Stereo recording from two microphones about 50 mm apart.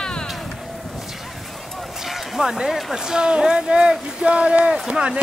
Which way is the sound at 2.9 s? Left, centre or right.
Centre.